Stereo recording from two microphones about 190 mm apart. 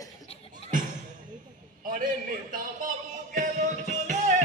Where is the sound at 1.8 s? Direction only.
45° right (ahead or behind).